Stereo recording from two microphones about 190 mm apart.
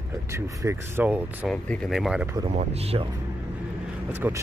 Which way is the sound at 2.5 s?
35° right (ahead or behind).